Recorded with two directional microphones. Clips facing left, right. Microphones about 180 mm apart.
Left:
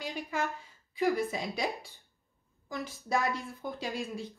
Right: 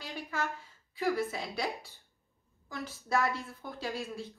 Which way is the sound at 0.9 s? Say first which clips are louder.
Left 2 dB; 15° left (ahead or behind).